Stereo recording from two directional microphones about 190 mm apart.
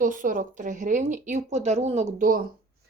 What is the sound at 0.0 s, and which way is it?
Speech, 45° right (ahead or behind).